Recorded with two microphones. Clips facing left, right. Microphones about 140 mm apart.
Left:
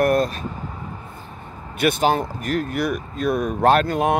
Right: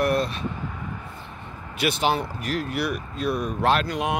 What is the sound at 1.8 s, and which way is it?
Speech, 50° left (ahead or behind).